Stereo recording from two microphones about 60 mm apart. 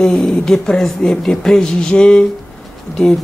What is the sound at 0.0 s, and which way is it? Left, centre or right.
Speech, centre.